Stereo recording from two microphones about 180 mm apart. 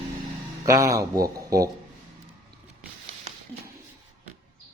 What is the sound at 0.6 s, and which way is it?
Speech, 20° right (ahead or behind).